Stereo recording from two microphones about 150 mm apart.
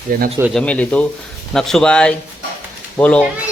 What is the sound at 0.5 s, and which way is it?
Speech, 10° left (ahead or behind).